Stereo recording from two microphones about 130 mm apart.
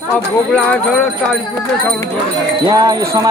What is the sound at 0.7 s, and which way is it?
Speech, 5° left (ahead or behind).